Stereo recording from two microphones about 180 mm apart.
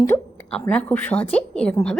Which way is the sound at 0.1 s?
10° left (ahead or behind).